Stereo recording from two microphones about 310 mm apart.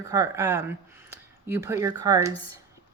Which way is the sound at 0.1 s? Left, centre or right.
Centre.